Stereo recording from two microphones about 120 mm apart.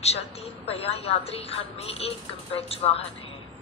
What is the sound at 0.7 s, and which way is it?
Speech, 55° left (ahead or behind).